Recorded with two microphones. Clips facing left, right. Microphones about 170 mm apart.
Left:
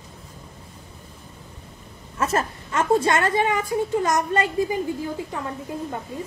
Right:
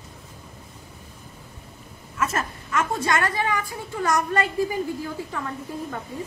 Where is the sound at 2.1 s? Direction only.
30° left (ahead or behind).